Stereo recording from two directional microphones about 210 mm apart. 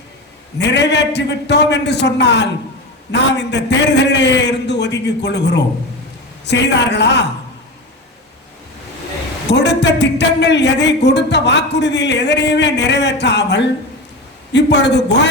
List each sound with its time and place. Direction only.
0.6 s speech: 55° left (ahead or behind)
9.5 s speech: 55° left (ahead or behind)